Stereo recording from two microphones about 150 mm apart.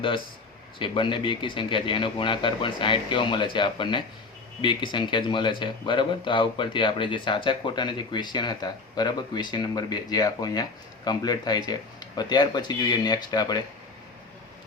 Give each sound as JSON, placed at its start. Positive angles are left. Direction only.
{"t": 0.8, "sound": "a man's voice", "side_deg": 35}